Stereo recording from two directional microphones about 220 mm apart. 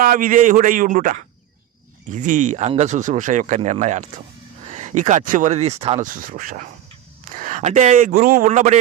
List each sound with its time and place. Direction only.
0.0 s speech: 40° right (ahead or behind)